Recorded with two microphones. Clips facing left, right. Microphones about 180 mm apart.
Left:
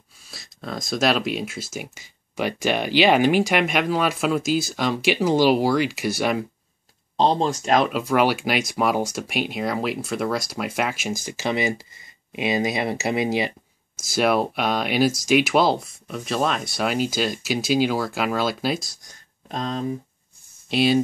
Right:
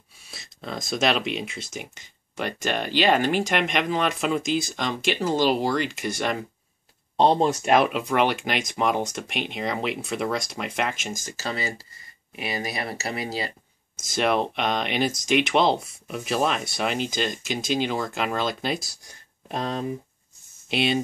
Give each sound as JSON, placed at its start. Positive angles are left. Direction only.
{"t": 0.3, "sound": "speech", "side_deg": 0}
{"t": 7.2, "sound": "speech", "side_deg": -10}
{"t": 8.0, "sound": "speech", "side_deg": 5}
{"t": 13.9, "sound": "speech", "side_deg": 5}
{"t": 19.0, "sound": "speech", "side_deg": -10}
{"t": 20.7, "sound": "speech", "side_deg": 0}